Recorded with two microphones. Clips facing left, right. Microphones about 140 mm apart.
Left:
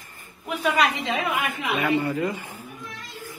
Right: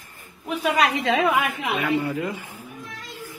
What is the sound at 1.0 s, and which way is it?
Speech, 90° right.